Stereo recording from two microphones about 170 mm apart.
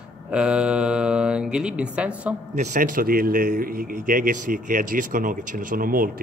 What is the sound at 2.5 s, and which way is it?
A man's voice, 45° right (ahead or behind).